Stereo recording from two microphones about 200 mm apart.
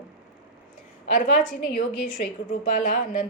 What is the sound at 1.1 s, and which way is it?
A woman's voice, 40° left (ahead or behind).